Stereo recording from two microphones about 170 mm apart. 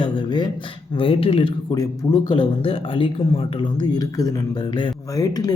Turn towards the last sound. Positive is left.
turn(degrees=25)  # may be behind; listen again after turning